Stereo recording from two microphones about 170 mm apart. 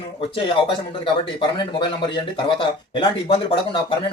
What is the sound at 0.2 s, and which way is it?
Speech, 30° left (ahead or behind).